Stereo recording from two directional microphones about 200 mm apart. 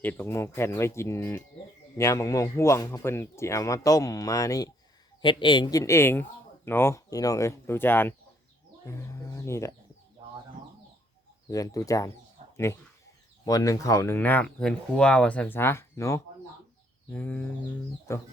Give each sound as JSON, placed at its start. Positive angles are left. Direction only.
{"t": 0.0, "sound": "speech", "side_deg": 10}
{"t": 8.9, "sound": "bird", "side_deg": 15}
{"t": 11.4, "sound": "speech", "side_deg": 15}